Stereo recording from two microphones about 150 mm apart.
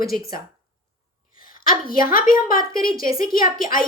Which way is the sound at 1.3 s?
70° left (ahead or behind).